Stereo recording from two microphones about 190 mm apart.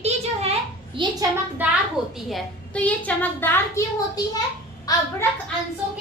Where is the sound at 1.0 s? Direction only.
25° right (ahead or behind).